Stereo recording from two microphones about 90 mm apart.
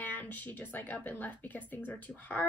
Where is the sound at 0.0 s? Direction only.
20° left (ahead or behind).